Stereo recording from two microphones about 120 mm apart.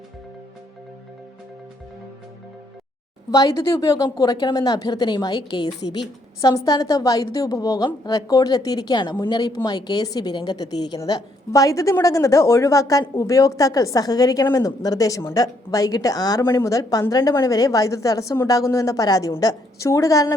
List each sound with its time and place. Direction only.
3.3 s a woman's voice: 30° left (ahead or behind)